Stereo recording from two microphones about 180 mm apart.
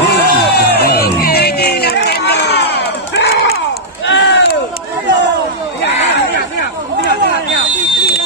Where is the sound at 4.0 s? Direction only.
80° left.